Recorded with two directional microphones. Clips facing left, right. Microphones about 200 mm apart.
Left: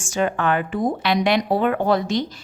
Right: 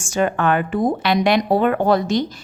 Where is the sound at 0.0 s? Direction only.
50° right (ahead or behind).